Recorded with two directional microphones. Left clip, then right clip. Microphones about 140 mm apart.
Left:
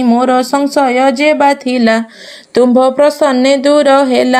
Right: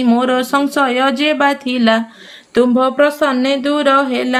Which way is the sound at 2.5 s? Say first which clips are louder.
Left 4 dB; 35° left (ahead or behind).